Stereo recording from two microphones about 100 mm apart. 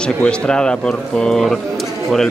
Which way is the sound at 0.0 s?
10° left (ahead or behind).